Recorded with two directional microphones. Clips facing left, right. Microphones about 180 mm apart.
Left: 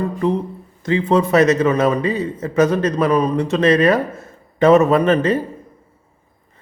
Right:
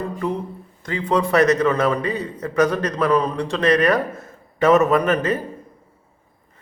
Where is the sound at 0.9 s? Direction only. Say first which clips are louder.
Left 5 dB; 25° left (ahead or behind).